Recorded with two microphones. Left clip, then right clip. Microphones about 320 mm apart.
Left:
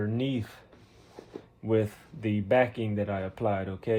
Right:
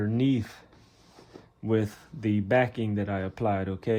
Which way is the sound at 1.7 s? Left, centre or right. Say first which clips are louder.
Left 1 dB; right.